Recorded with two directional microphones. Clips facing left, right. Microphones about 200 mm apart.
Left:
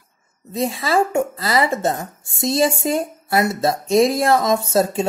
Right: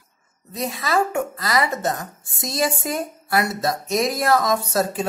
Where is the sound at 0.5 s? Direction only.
25° left (ahead or behind).